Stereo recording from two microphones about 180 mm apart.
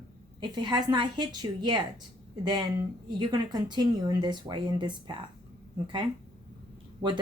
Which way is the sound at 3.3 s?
25° right (ahead or behind).